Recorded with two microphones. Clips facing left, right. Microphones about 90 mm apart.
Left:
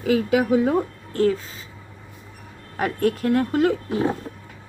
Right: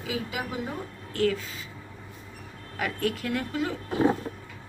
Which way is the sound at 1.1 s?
35° left (ahead or behind).